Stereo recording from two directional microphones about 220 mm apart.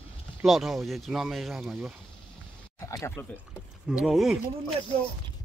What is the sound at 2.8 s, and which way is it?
Speech, 15° left (ahead or behind).